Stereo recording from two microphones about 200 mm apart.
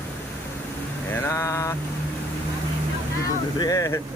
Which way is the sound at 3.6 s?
15° left (ahead or behind).